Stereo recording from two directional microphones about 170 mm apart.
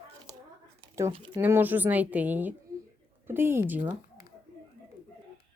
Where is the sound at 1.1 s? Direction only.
30° right (ahead or behind).